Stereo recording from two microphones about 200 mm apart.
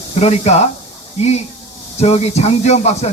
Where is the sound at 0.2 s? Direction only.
35° left (ahead or behind).